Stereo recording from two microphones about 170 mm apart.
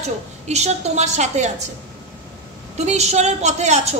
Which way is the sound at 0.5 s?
40° right (ahead or behind).